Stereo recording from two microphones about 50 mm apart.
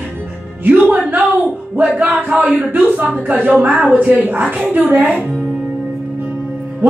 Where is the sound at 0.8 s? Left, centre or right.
Right.